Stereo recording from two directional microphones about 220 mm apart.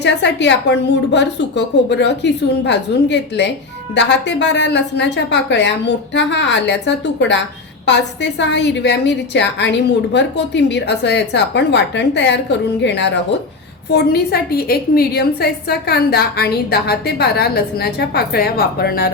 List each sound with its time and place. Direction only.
0.0 s a woman's voice: 50° left (ahead or behind)